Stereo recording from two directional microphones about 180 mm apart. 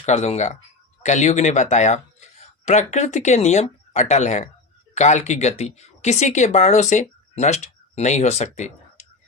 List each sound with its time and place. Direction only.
0.0 s speech: 40° left (ahead or behind)